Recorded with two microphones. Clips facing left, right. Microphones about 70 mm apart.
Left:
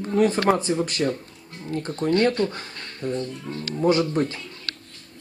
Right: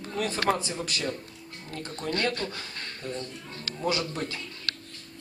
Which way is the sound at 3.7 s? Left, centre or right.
Left.